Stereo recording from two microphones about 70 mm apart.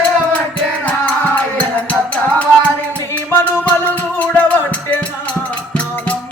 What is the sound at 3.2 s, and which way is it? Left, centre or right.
Music, left.